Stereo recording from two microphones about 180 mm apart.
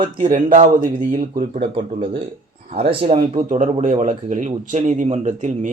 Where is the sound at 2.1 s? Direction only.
50° right (ahead or behind).